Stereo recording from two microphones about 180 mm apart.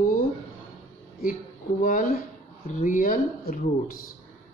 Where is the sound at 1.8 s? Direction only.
45° left (ahead or behind).